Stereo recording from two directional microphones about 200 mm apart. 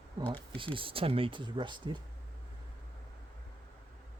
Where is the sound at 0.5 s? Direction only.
25° right (ahead or behind).